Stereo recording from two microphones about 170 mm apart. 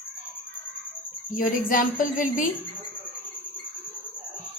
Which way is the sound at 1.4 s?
50° left (ahead or behind).